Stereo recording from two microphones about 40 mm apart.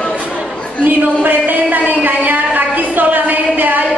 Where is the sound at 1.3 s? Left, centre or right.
Right.